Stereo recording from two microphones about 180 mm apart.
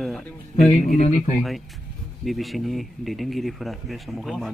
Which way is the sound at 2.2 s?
Centre (ahead or behind).